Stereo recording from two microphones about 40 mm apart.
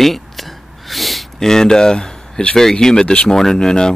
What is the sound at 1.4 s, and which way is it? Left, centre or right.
Speech, centre.